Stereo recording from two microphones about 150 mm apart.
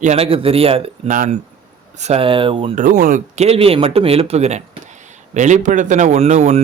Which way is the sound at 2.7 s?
60° right (ahead or behind).